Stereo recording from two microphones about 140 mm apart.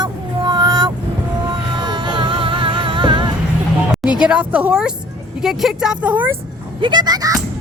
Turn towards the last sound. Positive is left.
turn(degrees=-25)  # may be behind; listen again after turning